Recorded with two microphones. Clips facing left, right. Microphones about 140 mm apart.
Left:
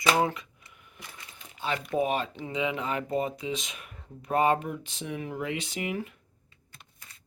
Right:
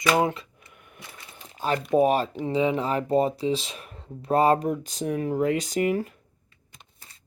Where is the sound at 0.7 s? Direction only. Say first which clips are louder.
Right 4 dB; 55° right (ahead or behind).